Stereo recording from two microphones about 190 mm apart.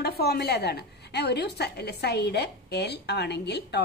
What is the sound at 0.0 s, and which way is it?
A woman's voice, 55° left (ahead or behind).